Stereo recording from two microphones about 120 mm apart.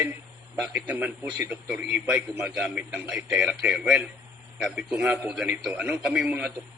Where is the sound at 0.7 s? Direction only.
15° right (ahead or behind).